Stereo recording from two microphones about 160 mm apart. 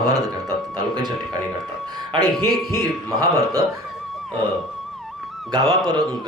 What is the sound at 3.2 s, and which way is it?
Speech, 25° right (ahead or behind).